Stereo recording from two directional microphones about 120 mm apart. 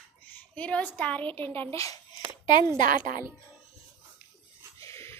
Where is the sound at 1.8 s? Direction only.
30° left (ahead or behind).